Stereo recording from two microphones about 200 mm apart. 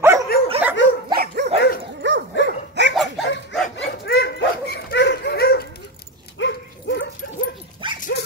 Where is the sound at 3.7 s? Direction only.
55° left (ahead or behind).